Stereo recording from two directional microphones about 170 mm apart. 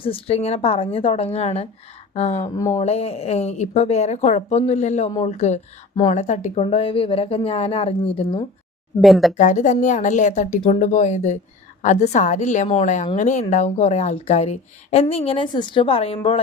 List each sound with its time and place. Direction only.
0.0 s speech: 35° left (ahead or behind)
2.4 s speech: 20° left (ahead or behind)
2.8 s a woman's voice: 35° left (ahead or behind)
6.6 s speech: 35° left (ahead or behind)
9.0 s speech: centre (ahead or behind)
9.4 s a woman's voice: 45° left (ahead or behind)